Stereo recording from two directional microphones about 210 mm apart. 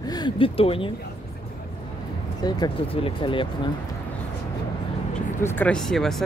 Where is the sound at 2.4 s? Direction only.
20° left (ahead or behind).